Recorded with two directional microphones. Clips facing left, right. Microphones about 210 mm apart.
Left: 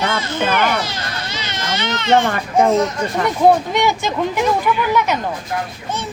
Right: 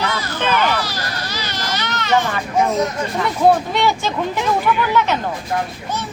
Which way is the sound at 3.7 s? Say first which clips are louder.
Left 1 dB; 15° left (ahead or behind).